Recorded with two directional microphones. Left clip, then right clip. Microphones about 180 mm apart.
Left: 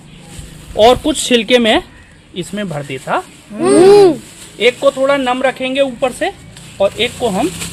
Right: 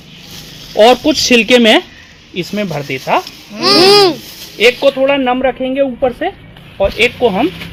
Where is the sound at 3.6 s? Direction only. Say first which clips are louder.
Left 1 dB; 45° left (ahead or behind).